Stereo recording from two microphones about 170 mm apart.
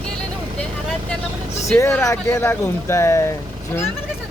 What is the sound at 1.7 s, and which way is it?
Speech, 15° left (ahead or behind).